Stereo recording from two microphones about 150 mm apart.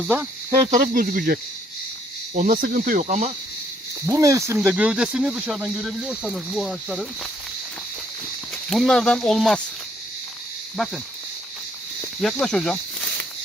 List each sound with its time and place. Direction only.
0.5 s speech: 45° right (ahead or behind)
0.8 s speech: 65° right (ahead or behind)
4.0 s speech: 20° right (ahead or behind)
4.6 s speech: 10° right (ahead or behind)
8.7 s speech: 5° left (ahead or behind)
10.8 s speech: centre (ahead or behind)
12.2 s speech: 5° left (ahead or behind)